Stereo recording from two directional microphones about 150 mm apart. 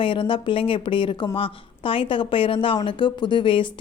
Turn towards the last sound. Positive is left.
turn(degrees=35)  # may be behind; listen again after turning